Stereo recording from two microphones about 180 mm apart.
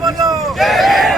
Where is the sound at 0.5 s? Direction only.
Centre (ahead or behind).